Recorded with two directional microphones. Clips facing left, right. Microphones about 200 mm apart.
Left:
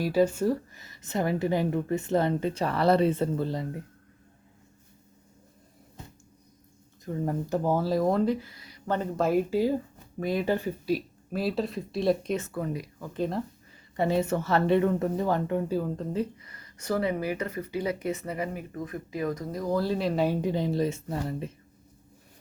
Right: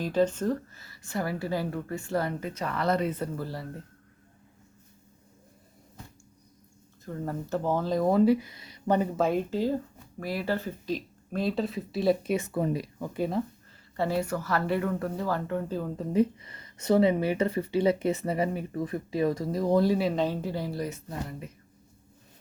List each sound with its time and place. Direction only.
0.0 s a woman's voice: 10° left (ahead or behind)
7.0 s speech: 15° left (ahead or behind); by 8.4 s 5° right (ahead or behind)
8.4 s a sound: 25° right (ahead or behind)
9.0 s speech: centre (ahead or behind)
12.5 s speech: 25° right (ahead or behind)
13.1 s speech: 5° right (ahead or behind)
13.9 s a woman's voice: 20° left (ahead or behind)
16.1 s speech: 25° right (ahead or behind)
20.0 s speech: centre (ahead or behind)
20.2 s a woman's voice: 15° left (ahead or behind)